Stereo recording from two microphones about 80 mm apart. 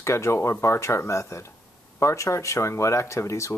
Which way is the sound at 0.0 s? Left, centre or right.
Left.